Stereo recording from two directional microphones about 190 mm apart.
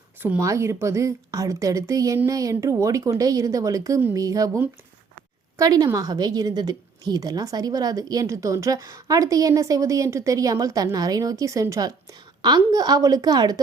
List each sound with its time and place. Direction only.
0.2 s a woman's voice: 10° right (ahead or behind)